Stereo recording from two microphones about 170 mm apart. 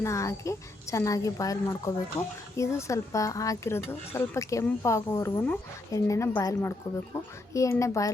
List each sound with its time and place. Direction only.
0.0 s a woman's voice: 15° left (ahead or behind)